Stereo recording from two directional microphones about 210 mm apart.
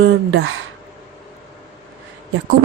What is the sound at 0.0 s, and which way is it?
Speech, 60° right (ahead or behind).